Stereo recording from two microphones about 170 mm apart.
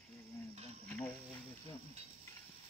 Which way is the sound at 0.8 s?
10° left (ahead or behind).